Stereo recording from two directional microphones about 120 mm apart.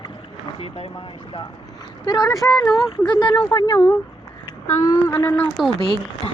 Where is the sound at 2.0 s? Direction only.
35° left (ahead or behind).